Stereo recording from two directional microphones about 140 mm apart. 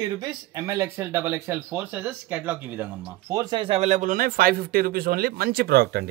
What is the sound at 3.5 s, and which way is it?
Speech, 40° right (ahead or behind).